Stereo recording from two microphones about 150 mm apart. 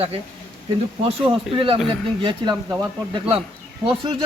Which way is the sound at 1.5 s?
35° right (ahead or behind).